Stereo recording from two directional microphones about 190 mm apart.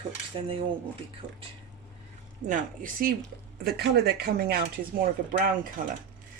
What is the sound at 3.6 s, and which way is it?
Speech, 55° right (ahead or behind).